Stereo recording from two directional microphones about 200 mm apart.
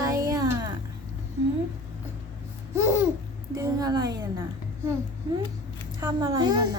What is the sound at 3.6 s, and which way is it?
Speech, 20° right (ahead or behind).